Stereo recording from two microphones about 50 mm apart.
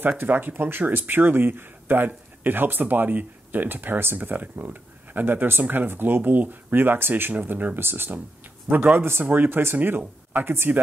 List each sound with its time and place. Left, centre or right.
0.2 s speech: right
8.6 s speech: right